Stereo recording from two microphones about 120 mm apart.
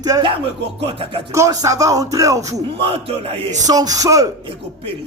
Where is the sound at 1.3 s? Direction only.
25° right (ahead or behind).